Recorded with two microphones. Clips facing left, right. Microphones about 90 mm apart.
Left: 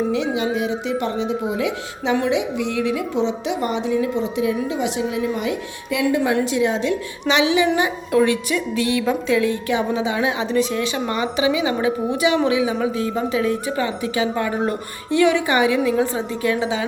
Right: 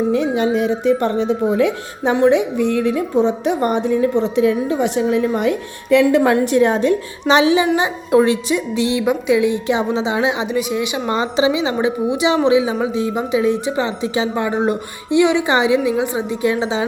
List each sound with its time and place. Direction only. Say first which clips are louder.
0.1 s speech: right 4 dB; 45° right (ahead or behind); by 6.3 s 65° right (ahead or behind)
6.3 s speech: right 5 dB; 50° right (ahead or behind)
7.3 s a child's voice: right 4 dB; 35° right (ahead or behind); by 11.1 s 15° right (ahead or behind)
11.1 s speech: right 4 dB; 30° right (ahead or behind)